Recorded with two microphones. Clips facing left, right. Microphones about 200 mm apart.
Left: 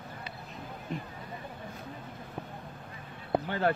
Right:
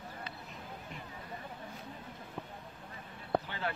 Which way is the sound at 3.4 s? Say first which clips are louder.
Left 10 dB; 50° left (ahead or behind).